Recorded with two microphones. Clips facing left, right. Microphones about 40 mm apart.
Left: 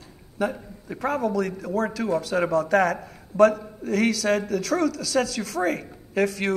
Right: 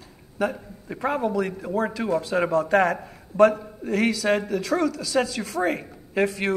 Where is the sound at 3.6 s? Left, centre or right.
Centre.